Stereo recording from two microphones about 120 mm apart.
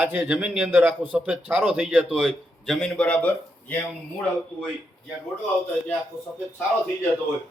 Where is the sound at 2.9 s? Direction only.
10° left (ahead or behind).